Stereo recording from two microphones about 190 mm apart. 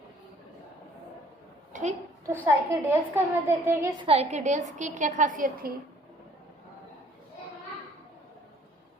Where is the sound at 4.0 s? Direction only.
30° right (ahead or behind).